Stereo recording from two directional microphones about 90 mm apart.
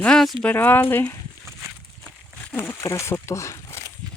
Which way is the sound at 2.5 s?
20° left (ahead or behind).